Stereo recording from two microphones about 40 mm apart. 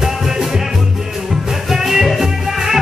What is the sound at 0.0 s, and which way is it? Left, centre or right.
Music, centre.